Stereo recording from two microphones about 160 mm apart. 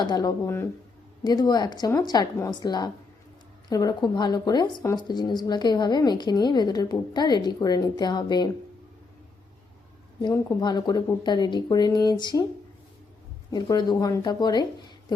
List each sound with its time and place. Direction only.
0.0 s a woman's voice: 25° left (ahead or behind)
0.4 s a woman's voice: 15° left (ahead or behind)
10.3 s a woman's voice: 25° left (ahead or behind)
13.5 s a woman's voice: 30° left (ahead or behind)